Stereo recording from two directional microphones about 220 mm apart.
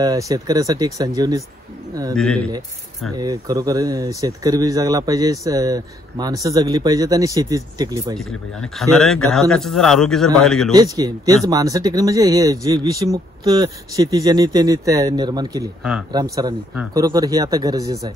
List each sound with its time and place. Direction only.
0.0 s speech: 15° right (ahead or behind)
2.1 s a man's voice: centre (ahead or behind)
3.2 s speech: 15° right (ahead or behind)
8.2 s a man's voice: centre (ahead or behind)
10.7 s speech: 15° right (ahead or behind)